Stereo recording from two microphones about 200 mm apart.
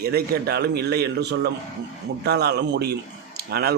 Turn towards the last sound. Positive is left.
turn(degrees=-50)  # may be behind; listen again after turning